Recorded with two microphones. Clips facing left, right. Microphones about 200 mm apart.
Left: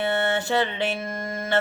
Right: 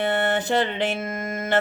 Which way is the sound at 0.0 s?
20° right (ahead or behind).